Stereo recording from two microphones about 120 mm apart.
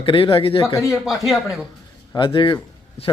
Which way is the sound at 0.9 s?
Centre (ahead or behind).